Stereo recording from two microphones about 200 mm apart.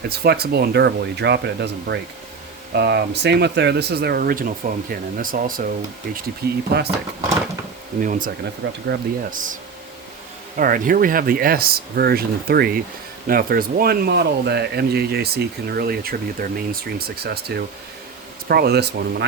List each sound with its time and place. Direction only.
0.0 s speech: 50° right (ahead or behind)
8.0 s speech: 40° right (ahead or behind)
10.6 s speech: 45° right (ahead or behind)